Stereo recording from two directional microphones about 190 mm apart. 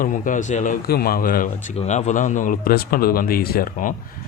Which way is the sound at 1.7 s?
35° left (ahead or behind).